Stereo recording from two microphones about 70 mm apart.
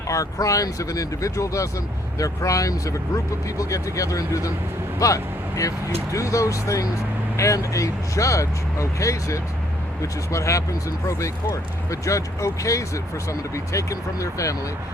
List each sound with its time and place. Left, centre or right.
0.1 s speech: left